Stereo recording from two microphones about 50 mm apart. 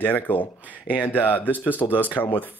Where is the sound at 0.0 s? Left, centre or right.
Left.